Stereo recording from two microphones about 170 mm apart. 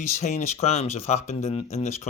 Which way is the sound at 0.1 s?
40° left (ahead or behind).